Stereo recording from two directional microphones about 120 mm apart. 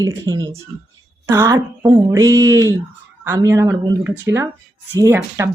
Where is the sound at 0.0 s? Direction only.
30° right (ahead or behind).